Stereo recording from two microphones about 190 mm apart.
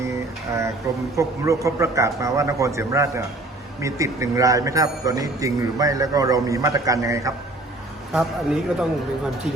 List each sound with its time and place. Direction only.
0.0 s a sound: 15° right (ahead or behind)
1.1 s a man's voice: 15° right (ahead or behind)
8.1 s speech: 5° right (ahead or behind)